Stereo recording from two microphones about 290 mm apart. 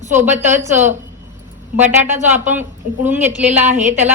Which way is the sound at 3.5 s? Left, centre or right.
Right.